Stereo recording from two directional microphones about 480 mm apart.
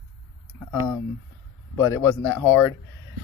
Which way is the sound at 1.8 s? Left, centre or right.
Centre.